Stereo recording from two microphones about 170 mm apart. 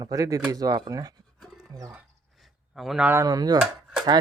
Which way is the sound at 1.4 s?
Centre (ahead or behind).